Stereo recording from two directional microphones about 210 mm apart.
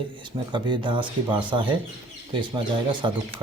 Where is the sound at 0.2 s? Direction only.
20° right (ahead or behind).